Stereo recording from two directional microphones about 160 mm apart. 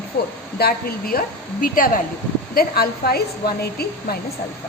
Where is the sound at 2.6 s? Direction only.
75° left (ahead or behind).